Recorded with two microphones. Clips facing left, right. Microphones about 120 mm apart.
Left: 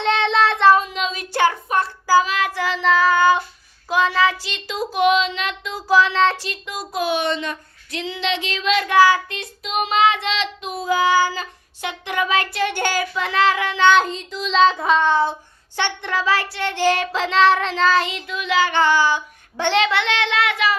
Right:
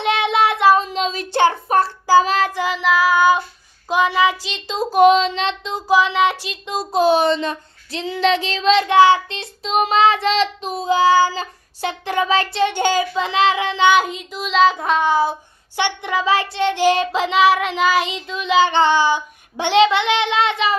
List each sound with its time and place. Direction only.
0.0 s child singing: 10° right (ahead or behind)
0.8 s child singing: 35° right (ahead or behind)
1.3 s a sound: 30° right (ahead or behind)
2.2 s child singing: 35° right (ahead or behind)
2.5 s child singing: 15° right (ahead or behind)
4.9 s child singing: 40° right (ahead or behind); by 13.9 s 20° right (ahead or behind)
13.9 s child singing: 5° right (ahead or behind); by 20.7 s 20° right (ahead or behind)